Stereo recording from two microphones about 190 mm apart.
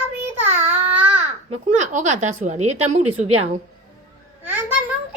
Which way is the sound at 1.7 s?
40° right (ahead or behind).